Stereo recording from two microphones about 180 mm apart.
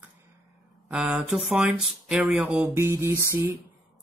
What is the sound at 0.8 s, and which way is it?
Speech, 10° right (ahead or behind).